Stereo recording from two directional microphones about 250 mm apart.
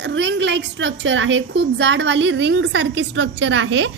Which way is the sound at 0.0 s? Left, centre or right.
Right.